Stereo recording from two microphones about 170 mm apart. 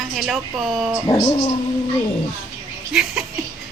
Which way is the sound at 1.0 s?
20° left (ahead or behind).